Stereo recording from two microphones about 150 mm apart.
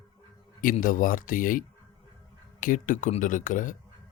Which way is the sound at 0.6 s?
65° left (ahead or behind).